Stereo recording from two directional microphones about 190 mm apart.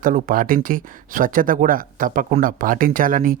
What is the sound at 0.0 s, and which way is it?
Speech, 45° right (ahead or behind).